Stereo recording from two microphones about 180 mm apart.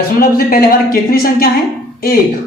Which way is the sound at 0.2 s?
55° left (ahead or behind).